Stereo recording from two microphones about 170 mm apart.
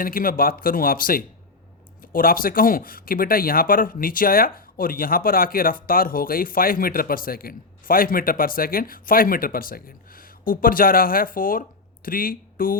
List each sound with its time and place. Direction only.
0.0 s speech: 55° left (ahead or behind)